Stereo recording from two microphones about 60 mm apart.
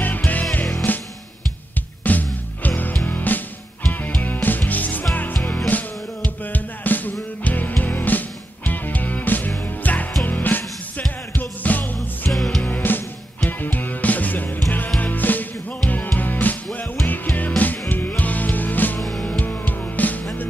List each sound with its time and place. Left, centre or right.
0.0 s music: left
2.1 s music: left
12.3 s music: centre
12.6 s music: left
18.9 s music: centre
19.2 s music: left